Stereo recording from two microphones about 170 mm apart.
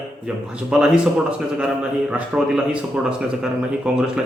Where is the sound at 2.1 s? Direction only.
5° right (ahead or behind).